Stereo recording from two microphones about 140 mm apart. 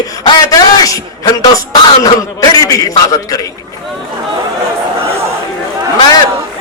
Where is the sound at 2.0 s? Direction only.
25° left (ahead or behind).